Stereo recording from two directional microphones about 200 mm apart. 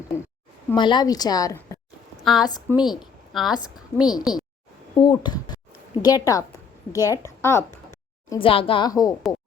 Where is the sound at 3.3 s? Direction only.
Centre (ahead or behind).